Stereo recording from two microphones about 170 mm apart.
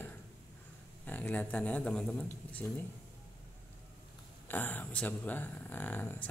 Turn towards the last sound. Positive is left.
turn(degrees=10)  # may be behind; listen again after turning